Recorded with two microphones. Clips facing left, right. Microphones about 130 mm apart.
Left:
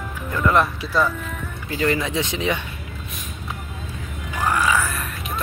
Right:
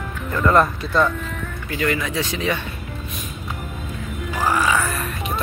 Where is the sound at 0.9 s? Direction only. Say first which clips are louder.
Right 2 dB; 5° left (ahead or behind).